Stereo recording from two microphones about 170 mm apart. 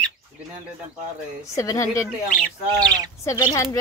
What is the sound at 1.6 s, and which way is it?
Speech, 20° left (ahead or behind).